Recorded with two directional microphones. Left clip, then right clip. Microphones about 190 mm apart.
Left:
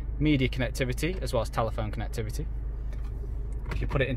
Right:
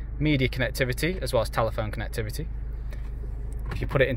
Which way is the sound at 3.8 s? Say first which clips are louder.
Right 6 dB; 10° right (ahead or behind).